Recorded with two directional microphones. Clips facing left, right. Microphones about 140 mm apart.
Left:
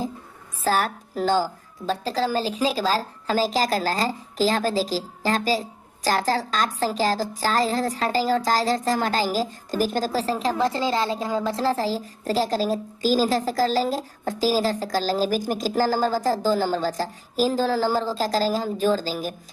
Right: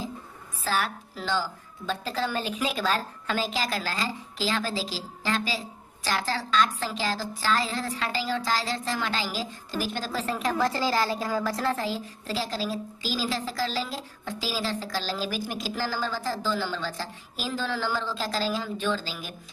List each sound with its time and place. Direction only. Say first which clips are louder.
0.6 s a woman's voice: left 6 dB; 40° left (ahead or behind)